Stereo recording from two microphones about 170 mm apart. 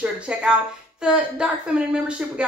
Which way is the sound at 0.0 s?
5° right (ahead or behind).